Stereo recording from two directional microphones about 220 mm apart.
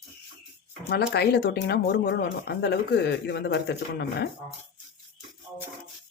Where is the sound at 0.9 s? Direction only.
50° left (ahead or behind).